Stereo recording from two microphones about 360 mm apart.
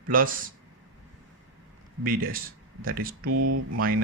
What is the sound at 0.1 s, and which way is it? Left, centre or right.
Speech, right.